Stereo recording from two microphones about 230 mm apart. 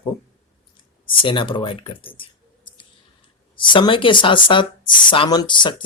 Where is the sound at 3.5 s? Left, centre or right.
Left.